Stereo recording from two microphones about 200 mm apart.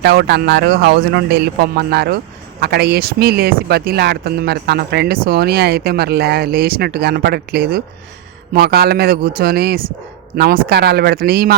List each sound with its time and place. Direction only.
0.0 s speech: 55° right (ahead or behind)